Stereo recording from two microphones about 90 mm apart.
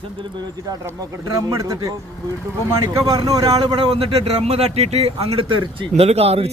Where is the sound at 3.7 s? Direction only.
85° right.